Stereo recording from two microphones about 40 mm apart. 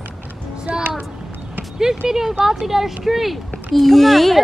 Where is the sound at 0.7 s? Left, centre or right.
Right.